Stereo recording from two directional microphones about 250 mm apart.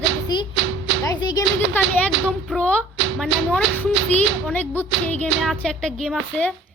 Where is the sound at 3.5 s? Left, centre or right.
Centre.